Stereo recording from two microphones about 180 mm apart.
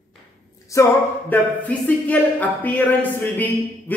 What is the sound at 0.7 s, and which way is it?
Speech, 15° left (ahead or behind).